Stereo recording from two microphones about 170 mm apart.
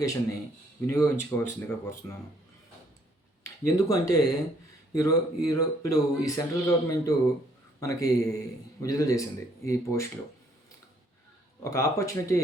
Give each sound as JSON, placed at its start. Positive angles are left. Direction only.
{"t": 0.0, "sound": "speech", "side_deg": 20}
{"t": 3.4, "sound": "speech", "side_deg": 20}
{"t": 11.6, "sound": "speech", "side_deg": 15}